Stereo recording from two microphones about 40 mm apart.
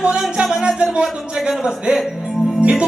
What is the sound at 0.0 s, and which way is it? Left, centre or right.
Music, right.